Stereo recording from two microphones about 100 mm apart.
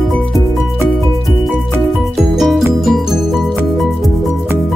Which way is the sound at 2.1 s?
Centre (ahead or behind).